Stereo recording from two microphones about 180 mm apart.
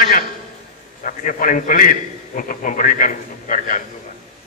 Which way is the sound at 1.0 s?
45° left (ahead or behind).